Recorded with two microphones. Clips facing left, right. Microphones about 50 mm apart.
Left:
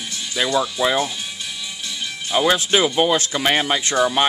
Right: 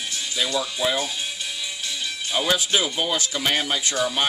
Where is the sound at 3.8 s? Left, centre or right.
Left.